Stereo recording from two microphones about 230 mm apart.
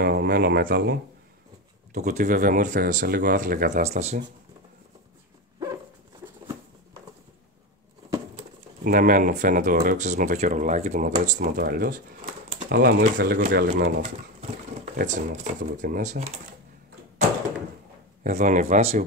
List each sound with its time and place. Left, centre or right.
0.0 s speech: right
2.0 s speech: right
3.8 s speech: right
8.8 s speech: right
15.0 s speech: right
18.2 s speech: right